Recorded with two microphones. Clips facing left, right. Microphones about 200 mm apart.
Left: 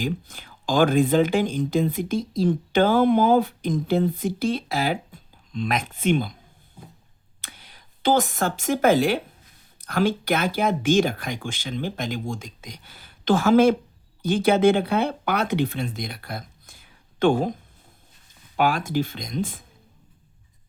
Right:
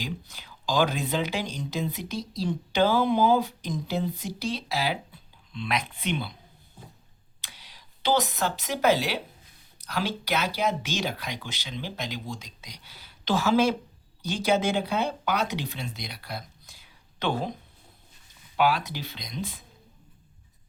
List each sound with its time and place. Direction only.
0.0 s speech: 50° left (ahead or behind)
7.4 s speech: 50° left (ahead or behind)
18.5 s speech: 45° left (ahead or behind)